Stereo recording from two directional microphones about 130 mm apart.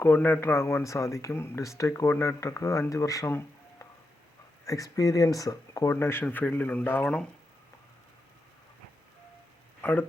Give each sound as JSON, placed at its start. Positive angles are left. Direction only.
{"t": 0.0, "sound": "speech", "side_deg": 15}
{"t": 9.8, "sound": "speech", "side_deg": 15}